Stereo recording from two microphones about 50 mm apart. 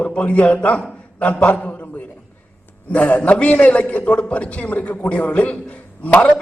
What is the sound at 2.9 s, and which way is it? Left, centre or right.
A man's voice, left.